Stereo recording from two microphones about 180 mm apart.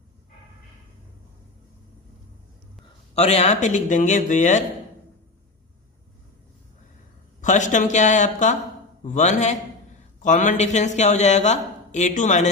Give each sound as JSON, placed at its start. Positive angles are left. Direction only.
{"t": 3.2, "sound": "speech", "side_deg": 35}
{"t": 7.4, "sound": "speech", "side_deg": 45}